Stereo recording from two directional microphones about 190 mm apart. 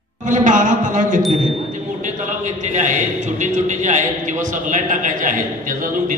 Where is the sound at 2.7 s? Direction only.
40° right (ahead or behind).